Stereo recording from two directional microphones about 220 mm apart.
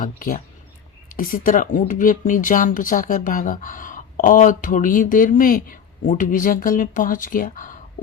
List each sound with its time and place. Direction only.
0.0 s speech: 40° left (ahead or behind)